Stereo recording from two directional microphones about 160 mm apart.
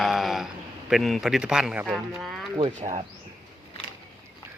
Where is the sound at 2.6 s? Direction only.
40° right (ahead or behind).